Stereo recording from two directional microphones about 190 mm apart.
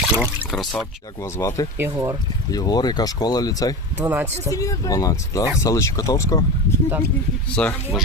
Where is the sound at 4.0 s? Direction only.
10° right (ahead or behind).